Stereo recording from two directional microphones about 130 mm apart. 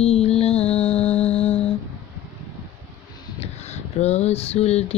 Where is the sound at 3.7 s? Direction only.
55° left (ahead or behind).